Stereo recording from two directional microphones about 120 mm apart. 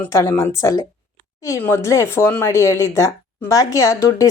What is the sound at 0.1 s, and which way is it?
A woman's voice, 20° left (ahead or behind).